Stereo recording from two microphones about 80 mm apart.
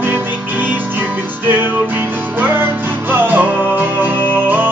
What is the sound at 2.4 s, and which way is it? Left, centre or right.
Music, right.